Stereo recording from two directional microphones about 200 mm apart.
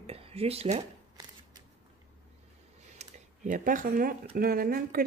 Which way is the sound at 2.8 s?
35° right (ahead or behind).